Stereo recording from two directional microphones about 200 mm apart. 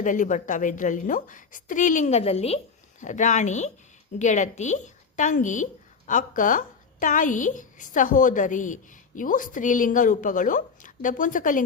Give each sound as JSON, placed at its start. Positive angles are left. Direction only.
{"t": 0.0, "sound": "a woman's voice", "side_deg": 40}